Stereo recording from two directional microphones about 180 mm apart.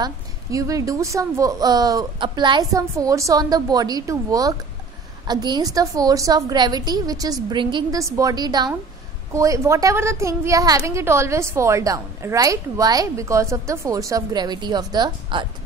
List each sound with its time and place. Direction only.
0.0 s a woman's voice: 20° right (ahead or behind)